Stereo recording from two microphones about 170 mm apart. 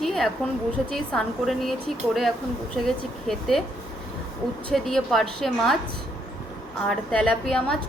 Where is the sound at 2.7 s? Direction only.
Centre (ahead or behind).